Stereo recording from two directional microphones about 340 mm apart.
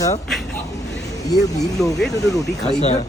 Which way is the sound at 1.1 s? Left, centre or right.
Centre.